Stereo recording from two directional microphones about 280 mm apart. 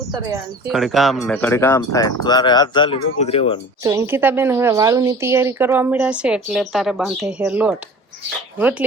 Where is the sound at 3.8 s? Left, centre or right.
Centre.